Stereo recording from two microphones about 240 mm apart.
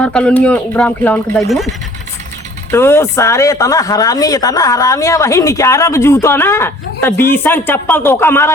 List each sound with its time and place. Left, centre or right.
0.0 s speech: centre
2.7 s speech: centre